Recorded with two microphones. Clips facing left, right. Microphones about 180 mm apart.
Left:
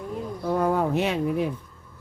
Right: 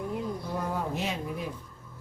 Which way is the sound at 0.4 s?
65° left (ahead or behind).